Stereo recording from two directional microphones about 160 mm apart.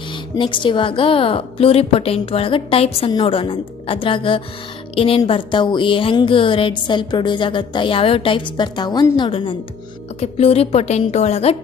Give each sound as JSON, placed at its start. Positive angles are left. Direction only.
{"t": 0.4, "sound": "a woman's voice", "side_deg": 30}